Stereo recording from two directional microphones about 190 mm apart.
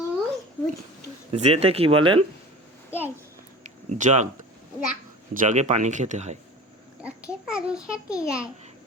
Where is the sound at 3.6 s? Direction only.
40° right (ahead or behind).